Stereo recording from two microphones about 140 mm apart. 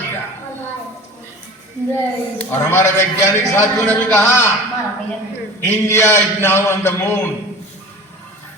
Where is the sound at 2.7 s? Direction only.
15° left (ahead or behind).